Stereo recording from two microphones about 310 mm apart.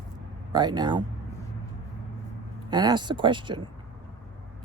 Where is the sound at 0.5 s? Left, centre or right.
Centre.